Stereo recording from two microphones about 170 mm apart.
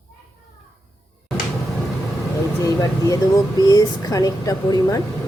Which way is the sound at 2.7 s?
20° left (ahead or behind).